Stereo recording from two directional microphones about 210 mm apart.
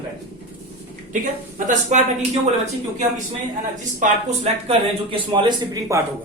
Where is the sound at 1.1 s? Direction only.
35° right (ahead or behind).